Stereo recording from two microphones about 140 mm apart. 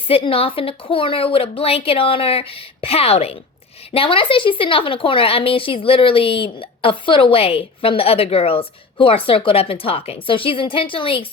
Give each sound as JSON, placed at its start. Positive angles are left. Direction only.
{"t": 0.1, "sound": "a woman's voice", "side_deg": 40}